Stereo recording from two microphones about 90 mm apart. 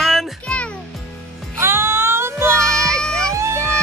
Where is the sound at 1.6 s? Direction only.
30° right (ahead or behind).